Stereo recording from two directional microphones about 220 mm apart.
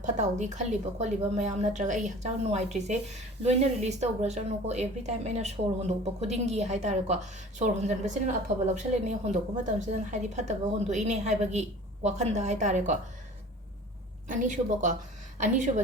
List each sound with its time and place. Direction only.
0.0 s speech: 30° right (ahead or behind)
14.3 s speech: 35° right (ahead or behind)